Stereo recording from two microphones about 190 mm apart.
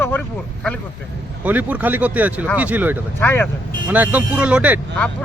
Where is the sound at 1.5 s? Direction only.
10° right (ahead or behind).